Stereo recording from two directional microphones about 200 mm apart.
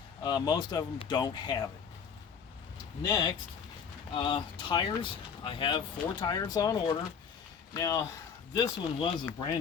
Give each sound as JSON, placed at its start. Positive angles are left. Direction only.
{"t": 0.2, "sound": "speech", "side_deg": 20}
{"t": 3.0, "sound": "speech", "side_deg": 20}